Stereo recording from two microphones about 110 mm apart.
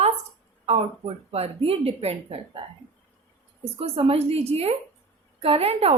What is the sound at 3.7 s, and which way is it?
Speech, 60° right (ahead or behind).